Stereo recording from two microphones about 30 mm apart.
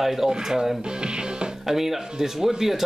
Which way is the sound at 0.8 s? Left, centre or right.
Right.